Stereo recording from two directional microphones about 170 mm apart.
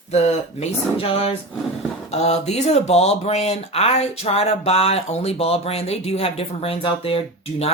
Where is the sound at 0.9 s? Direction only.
35° left (ahead or behind).